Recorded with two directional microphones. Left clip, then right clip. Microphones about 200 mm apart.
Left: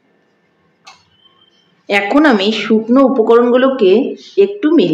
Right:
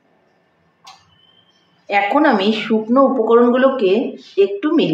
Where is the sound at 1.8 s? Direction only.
60° left (ahead or behind); by 4.0 s 40° left (ahead or behind).